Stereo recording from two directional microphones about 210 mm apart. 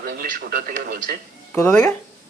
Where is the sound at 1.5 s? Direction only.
10° left (ahead or behind).